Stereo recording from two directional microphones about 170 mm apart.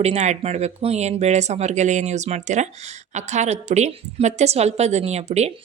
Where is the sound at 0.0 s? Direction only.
40° right (ahead or behind).